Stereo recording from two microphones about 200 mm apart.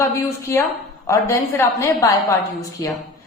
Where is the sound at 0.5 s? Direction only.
15° left (ahead or behind).